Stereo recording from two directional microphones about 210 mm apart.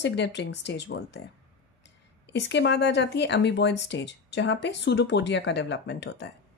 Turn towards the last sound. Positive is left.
turn(degrees=55)  # may be behind; listen again after turning